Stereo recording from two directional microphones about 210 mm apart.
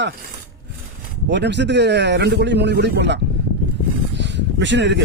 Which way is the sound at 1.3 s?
55° right (ahead or behind).